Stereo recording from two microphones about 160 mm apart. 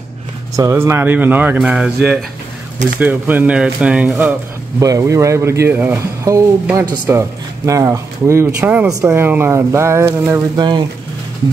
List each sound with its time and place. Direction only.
0.6 s speech: 15° right (ahead or behind)
3.0 s speech: 10° right (ahead or behind)
4.7 s speech: 20° right (ahead or behind)